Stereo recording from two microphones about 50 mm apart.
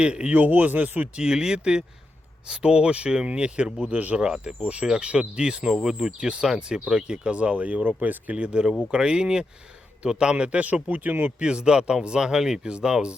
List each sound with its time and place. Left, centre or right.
0.0 s speech: centre
0.3 s speech: right
1.1 s speech: centre
4.2 s speech: centre
7.3 s speech: right
11.3 s speech: centre